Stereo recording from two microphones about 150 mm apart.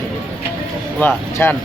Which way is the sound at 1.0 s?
15° left (ahead or behind).